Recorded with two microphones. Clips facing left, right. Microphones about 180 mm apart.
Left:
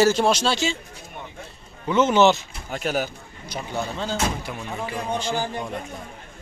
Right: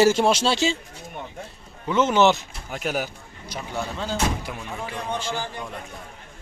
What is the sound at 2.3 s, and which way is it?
Speech, 10° right (ahead or behind).